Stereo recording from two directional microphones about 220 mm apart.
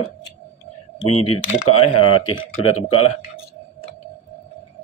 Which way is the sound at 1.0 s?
90° left.